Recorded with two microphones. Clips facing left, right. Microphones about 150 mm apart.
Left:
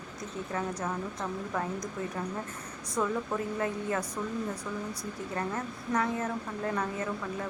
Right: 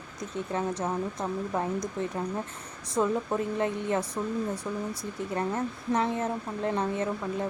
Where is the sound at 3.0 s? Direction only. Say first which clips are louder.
Right 4 dB; 25° right (ahead or behind).